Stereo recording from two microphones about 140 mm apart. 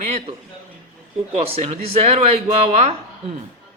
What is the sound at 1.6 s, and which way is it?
Speech, 50° right (ahead or behind).